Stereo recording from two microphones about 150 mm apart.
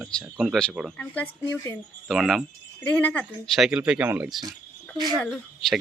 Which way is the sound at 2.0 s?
Centre (ahead or behind).